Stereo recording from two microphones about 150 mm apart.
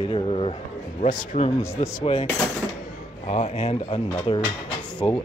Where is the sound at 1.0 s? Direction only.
55° left (ahead or behind).